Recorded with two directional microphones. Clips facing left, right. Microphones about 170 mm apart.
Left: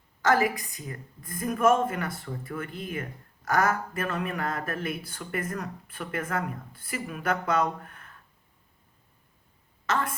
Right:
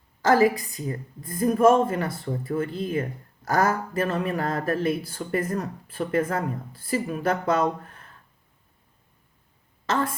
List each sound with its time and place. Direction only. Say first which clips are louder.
0.2 s a woman's voice: right 5 dB; 30° right (ahead or behind)
9.8 s speech: right 3 dB; 30° right (ahead or behind)